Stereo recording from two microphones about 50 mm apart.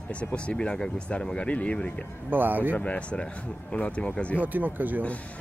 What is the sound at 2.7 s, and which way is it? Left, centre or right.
Speech, left.